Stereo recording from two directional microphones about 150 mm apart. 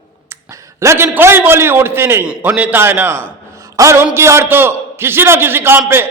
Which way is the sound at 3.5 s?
20° right (ahead or behind).